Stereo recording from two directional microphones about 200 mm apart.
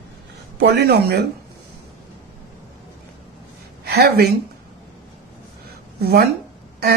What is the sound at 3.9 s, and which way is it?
Speech, 55° right (ahead or behind).